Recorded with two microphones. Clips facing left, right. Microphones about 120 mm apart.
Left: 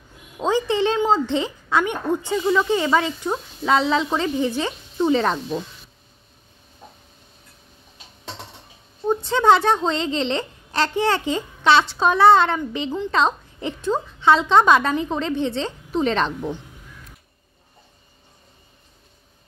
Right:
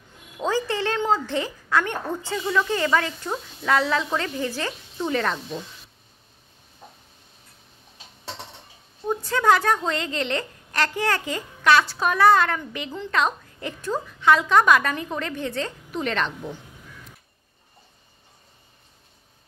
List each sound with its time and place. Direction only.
0.4 s a woman's voice: 20° left (ahead or behind)
9.1 s a woman's voice: 25° left (ahead or behind)